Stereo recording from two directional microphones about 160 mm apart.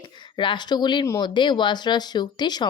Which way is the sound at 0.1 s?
30° left (ahead or behind).